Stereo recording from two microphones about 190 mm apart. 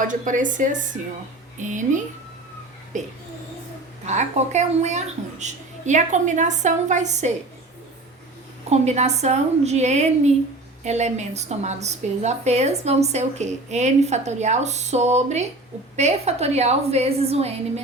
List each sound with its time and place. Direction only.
0.1 s a woman's voice: 45° right (ahead or behind)
8.7 s a woman's voice: 35° right (ahead or behind)